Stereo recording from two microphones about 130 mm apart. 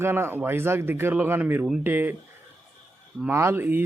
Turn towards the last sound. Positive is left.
turn(degrees=-15)  # may be behind; listen again after turning